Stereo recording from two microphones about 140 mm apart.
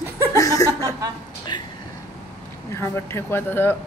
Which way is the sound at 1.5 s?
35° left (ahead or behind).